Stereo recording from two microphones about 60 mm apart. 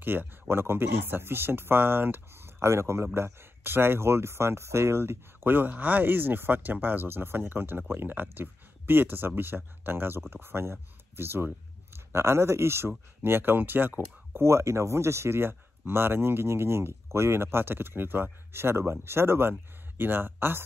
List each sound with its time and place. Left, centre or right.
0.0 s speech: right
14.4 s speech: right